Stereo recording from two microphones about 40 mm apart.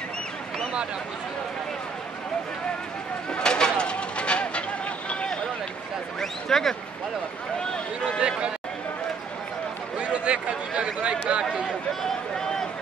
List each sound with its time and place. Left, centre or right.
3.3 s a sound: left
5.1 s run: left
6.5 s speech: centre
9.9 s speech: right